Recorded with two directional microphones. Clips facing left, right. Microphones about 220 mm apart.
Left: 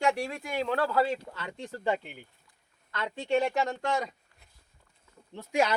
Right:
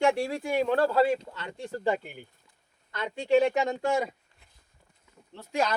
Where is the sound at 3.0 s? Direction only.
10° right (ahead or behind).